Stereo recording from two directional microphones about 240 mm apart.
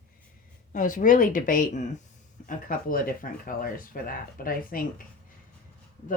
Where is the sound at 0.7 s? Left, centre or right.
Left.